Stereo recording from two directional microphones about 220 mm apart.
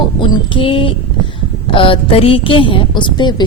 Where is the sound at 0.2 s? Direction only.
25° left (ahead or behind).